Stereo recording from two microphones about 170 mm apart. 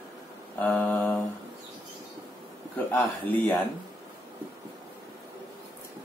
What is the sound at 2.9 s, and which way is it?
Speech, 10° left (ahead or behind).